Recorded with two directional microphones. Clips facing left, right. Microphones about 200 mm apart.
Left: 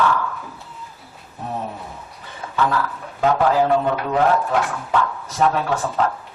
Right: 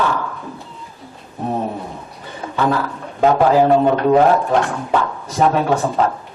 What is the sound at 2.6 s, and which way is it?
Speech, 20° right (ahead or behind).